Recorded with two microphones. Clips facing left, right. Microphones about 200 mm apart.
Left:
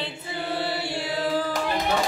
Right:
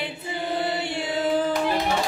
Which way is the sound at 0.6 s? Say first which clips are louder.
Right 2 dB; 20° right (ahead or behind).